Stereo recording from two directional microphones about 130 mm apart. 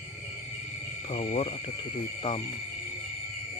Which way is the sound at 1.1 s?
50° left (ahead or behind).